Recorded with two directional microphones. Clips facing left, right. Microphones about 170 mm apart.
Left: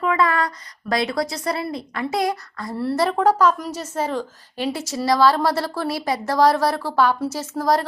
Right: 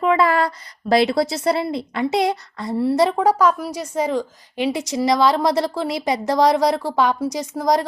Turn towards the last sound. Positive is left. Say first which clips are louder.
# right 1 dB
turn(degrees=-15)  # may be behind; listen again after turning